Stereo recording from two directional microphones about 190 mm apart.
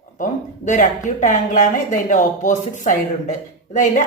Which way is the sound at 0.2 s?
40° left (ahead or behind).